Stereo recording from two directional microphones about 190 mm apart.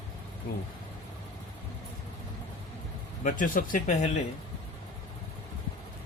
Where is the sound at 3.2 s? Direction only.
45° left (ahead or behind).